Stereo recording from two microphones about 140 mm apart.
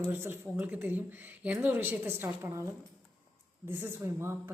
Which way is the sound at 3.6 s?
15° right (ahead or behind).